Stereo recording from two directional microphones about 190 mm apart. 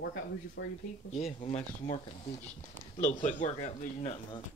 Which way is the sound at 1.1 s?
35° left (ahead or behind).